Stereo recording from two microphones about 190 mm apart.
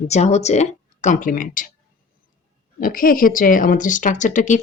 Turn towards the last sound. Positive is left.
turn(degrees=40)  # may be behind; listen again after turning